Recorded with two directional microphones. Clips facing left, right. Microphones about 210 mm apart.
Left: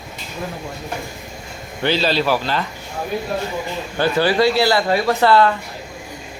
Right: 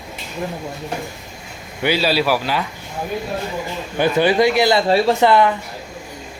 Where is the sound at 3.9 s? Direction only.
20° right (ahead or behind).